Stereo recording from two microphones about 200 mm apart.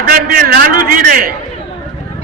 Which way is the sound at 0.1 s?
45° right (ahead or behind).